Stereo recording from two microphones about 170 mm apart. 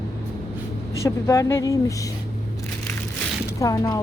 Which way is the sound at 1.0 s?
15° left (ahead or behind).